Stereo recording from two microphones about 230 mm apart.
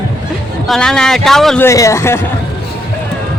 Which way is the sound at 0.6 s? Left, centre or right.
Centre.